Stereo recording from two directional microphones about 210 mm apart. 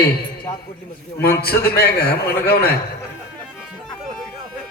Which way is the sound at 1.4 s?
45° left (ahead or behind).